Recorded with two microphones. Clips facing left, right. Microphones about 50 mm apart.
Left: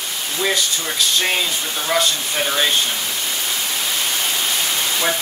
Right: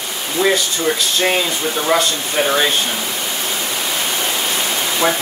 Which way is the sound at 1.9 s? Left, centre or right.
Centre.